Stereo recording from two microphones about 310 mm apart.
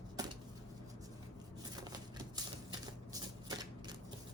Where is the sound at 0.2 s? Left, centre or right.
Centre.